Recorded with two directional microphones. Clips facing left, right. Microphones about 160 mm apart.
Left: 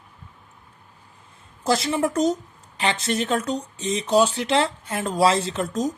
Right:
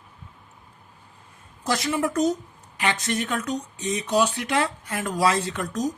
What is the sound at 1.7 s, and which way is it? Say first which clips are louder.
Speech: left 3 dB; 30° left (ahead or behind).